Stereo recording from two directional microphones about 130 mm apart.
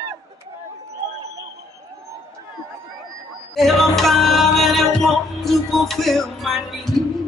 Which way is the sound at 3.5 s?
Centre (ahead or behind).